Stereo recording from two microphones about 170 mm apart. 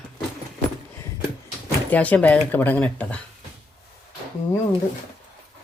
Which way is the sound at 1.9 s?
10° left (ahead or behind).